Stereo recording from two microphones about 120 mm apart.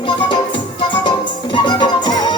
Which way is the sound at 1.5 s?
40° left (ahead or behind).